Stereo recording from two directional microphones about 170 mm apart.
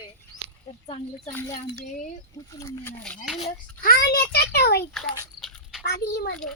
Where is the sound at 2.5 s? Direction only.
15° left (ahead or behind).